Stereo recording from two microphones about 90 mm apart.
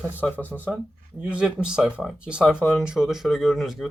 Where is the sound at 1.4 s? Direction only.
10° right (ahead or behind).